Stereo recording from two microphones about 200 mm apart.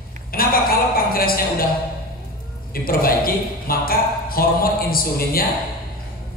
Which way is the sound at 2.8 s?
45° left (ahead or behind).